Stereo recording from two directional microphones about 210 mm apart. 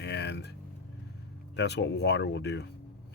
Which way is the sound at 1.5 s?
55° left (ahead or behind).